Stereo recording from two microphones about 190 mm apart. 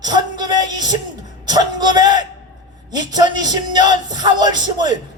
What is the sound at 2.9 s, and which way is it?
A man's voice, 20° right (ahead or behind).